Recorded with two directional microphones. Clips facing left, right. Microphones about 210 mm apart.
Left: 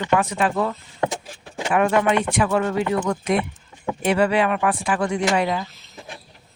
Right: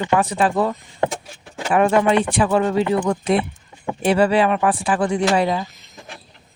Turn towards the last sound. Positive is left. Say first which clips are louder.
# right 3 dB
turn(degrees=-30)  # may be behind; listen again after turning